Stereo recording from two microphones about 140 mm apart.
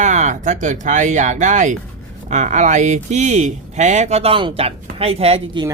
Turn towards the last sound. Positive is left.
turn(degrees=-45)  # may be behind; listen again after turning